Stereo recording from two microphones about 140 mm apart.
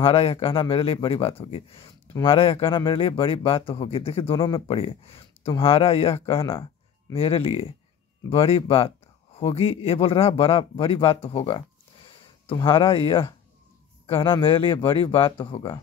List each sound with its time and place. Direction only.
0.0 s speech: 45° left (ahead or behind)